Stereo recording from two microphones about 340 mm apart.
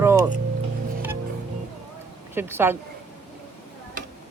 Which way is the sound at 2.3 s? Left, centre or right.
Centre.